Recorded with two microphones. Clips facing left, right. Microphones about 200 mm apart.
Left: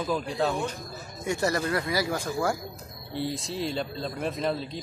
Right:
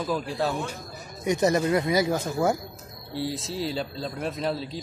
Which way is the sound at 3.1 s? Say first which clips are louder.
Right 1 dB; centre (ahead or behind).